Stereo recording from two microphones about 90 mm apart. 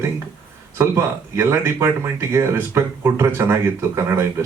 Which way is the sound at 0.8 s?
30° right (ahead or behind).